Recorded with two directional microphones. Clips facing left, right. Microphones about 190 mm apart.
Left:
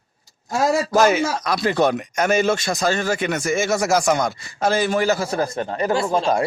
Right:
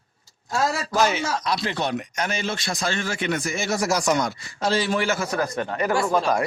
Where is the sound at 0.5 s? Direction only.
20° left (ahead or behind).